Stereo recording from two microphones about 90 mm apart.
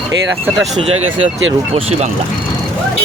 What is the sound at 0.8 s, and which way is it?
Speech, 90° right.